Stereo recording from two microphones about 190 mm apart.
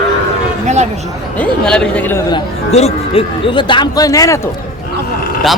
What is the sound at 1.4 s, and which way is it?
Speech, 5° left (ahead or behind).